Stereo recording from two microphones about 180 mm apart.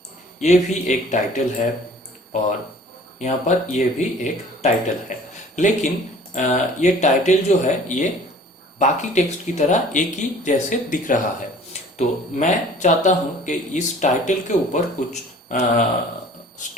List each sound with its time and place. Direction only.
0.3 s speech: 40° left (ahead or behind)
3.2 s speech: 40° left (ahead or behind)